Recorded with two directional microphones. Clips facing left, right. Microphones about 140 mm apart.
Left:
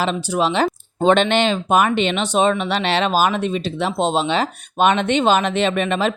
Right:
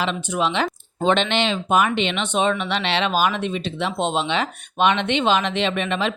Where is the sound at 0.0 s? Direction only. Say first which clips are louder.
Left 3 dB; 35° left (ahead or behind).